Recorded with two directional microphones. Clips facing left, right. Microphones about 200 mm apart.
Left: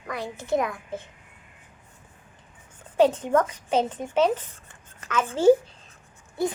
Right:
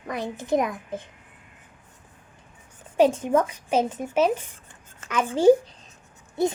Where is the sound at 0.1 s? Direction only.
20° right (ahead or behind).